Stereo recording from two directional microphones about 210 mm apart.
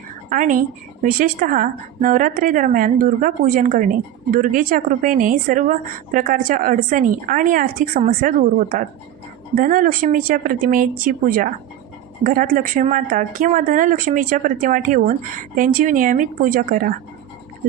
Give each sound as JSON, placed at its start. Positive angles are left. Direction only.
{"t": 0.3, "sound": "speech", "side_deg": -40}